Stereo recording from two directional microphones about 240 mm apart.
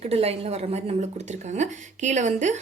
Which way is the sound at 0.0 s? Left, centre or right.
Right.